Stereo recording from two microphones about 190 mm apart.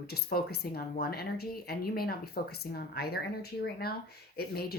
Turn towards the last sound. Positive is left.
turn(degrees=55)  # may be behind; listen again after turning